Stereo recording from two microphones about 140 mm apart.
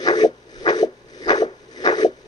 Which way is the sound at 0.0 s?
30° left (ahead or behind).